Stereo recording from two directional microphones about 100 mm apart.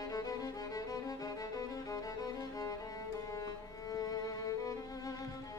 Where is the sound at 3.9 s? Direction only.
35° left (ahead or behind).